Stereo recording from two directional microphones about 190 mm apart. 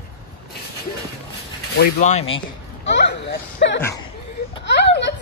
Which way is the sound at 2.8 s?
65° left (ahead or behind).